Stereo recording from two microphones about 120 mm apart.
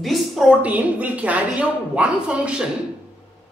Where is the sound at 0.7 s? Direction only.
10° right (ahead or behind).